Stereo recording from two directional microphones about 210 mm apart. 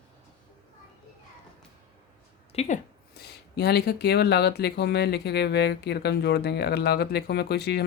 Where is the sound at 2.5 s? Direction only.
30° left (ahead or behind).